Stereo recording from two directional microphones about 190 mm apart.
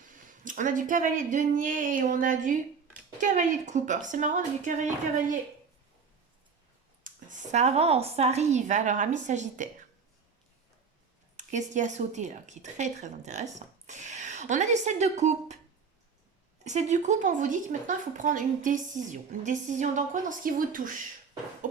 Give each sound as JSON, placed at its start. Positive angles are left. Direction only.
{"t": 0.3, "sound": "speech", "side_deg": -45}
{"t": 7.0, "sound": "speech", "side_deg": -40}
{"t": 11.3, "sound": "speech", "side_deg": -40}
{"t": 16.6, "sound": "speech", "side_deg": -40}
{"t": 21.6, "sound": "a sound", "side_deg": -40}